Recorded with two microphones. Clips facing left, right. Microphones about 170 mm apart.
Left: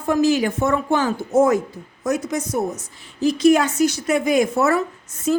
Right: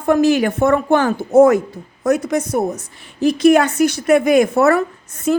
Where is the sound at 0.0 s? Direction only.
60° right (ahead or behind).